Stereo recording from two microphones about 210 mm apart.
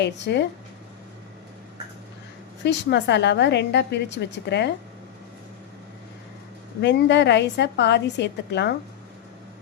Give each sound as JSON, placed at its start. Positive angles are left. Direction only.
{"t": 0.0, "sound": "a woman's voice", "side_deg": 55}
{"t": 2.6, "sound": "a woman's voice", "side_deg": 55}
{"t": 6.8, "sound": "a woman's voice", "side_deg": 55}